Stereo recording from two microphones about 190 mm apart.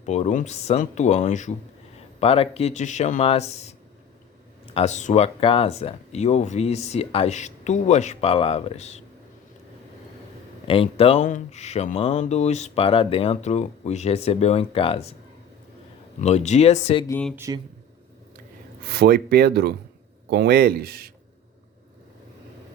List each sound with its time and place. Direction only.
0.0 s speech: 35° left (ahead or behind)
10.7 s speech: 30° left (ahead or behind)
16.2 s speech: 35° left (ahead or behind)
17.1 s speech: 10° left (ahead or behind)
17.3 s speech: 15° right (ahead or behind)
18.9 s speech: 55° right (ahead or behind)